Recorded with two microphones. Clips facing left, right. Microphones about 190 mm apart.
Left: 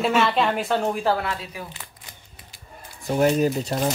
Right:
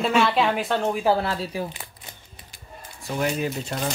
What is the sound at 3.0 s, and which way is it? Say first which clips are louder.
Speech: left 6 dB; 40° left (ahead or behind).